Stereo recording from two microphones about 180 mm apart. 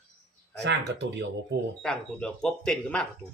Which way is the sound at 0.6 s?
75° right (ahead or behind).